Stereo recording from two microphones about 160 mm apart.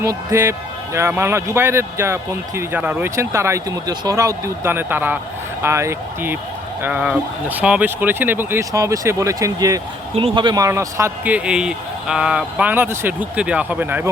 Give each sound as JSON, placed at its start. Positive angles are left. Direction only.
{"t": 0.0, "sound": "a man's voice", "side_deg": -20}
{"t": 10.2, "sound": "a man's voice", "side_deg": -35}